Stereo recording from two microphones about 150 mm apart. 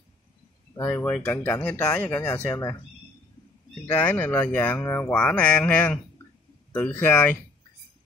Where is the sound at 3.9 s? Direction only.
10° left (ahead or behind).